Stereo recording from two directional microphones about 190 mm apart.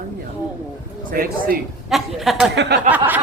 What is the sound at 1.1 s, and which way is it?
Speech, 50° right (ahead or behind).